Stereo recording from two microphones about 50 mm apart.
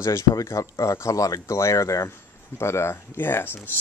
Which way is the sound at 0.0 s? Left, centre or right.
Left.